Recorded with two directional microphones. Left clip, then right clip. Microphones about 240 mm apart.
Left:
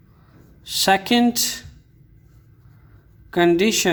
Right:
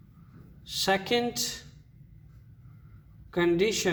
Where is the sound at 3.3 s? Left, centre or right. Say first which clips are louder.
Left 8 dB; left.